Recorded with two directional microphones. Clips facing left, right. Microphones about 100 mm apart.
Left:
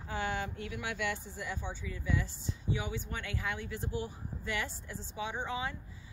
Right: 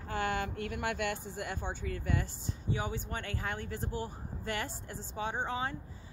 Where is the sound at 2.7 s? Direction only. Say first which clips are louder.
Right 1 dB; 40° right (ahead or behind).